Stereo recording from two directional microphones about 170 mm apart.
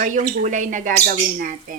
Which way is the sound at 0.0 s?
50° right (ahead or behind).